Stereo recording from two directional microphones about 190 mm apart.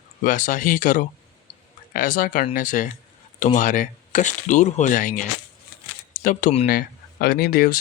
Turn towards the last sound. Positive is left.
turn(degrees=50)  # may be behind; listen again after turning